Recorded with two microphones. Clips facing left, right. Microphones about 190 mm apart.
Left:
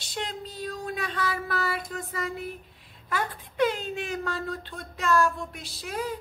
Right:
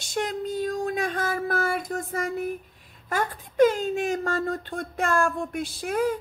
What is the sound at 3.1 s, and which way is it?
Speech, 45° right (ahead or behind).